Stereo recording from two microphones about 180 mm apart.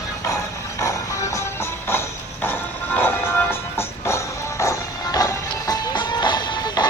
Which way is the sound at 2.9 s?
10° left (ahead or behind).